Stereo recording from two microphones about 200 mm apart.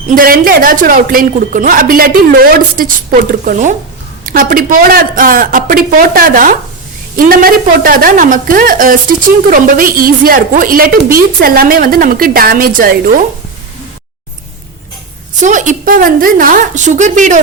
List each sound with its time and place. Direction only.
0.1 s a woman's voice: 45° right (ahead or behind)
15.4 s a woman's voice: 40° right (ahead or behind)